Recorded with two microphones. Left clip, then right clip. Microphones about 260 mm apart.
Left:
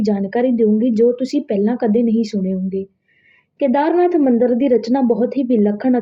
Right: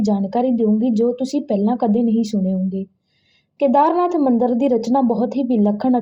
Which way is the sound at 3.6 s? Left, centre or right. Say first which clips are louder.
Even; right.